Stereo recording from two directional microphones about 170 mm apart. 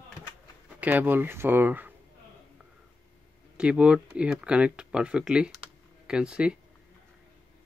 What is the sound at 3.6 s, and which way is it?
Speech, 5° right (ahead or behind).